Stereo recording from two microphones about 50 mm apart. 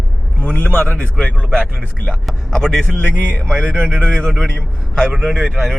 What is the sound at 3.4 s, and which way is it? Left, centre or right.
Speech, centre.